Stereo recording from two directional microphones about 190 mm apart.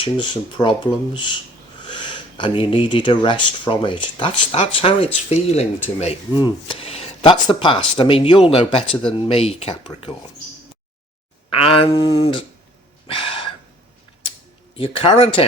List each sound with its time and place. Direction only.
0.0 s speech: 25° left (ahead or behind)
11.5 s speech: 30° left (ahead or behind)
13.1 s gasp: 30° left (ahead or behind)
14.8 s speech: 30° left (ahead or behind)